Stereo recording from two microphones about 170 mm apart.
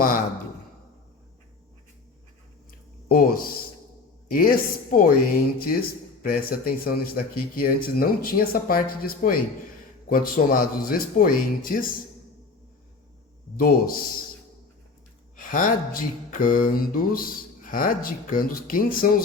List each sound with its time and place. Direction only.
3.1 s mantra: 60° left (ahead or behind)
13.6 s mantra: 60° left (ahead or behind)
15.4 s mantra: 55° left (ahead or behind)